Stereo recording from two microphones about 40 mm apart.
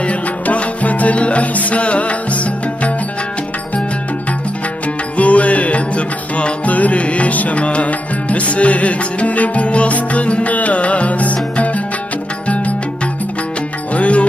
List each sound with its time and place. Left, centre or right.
0.0 s music: left
5.1 s music: left